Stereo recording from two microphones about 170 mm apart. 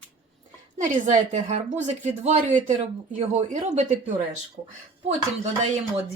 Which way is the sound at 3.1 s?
40° right (ahead or behind).